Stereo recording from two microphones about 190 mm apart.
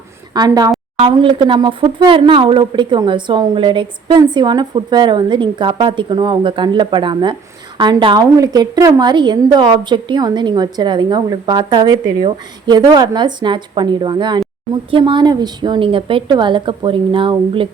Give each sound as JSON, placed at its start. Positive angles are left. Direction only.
{"t": 0.3, "sound": "a woman's voice", "side_deg": -20}